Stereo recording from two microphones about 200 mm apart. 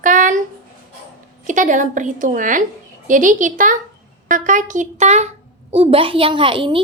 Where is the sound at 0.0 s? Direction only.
40° right (ahead or behind).